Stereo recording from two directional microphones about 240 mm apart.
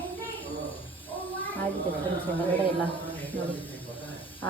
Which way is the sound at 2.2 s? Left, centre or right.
Centre.